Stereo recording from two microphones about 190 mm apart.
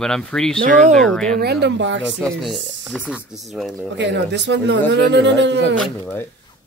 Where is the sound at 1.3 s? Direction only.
60° right (ahead or behind).